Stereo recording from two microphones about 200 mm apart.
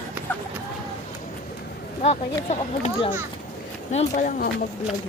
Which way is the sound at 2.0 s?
30° left (ahead or behind).